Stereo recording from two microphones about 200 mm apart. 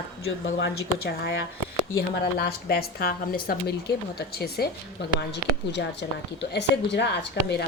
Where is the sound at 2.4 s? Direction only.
50° left (ahead or behind).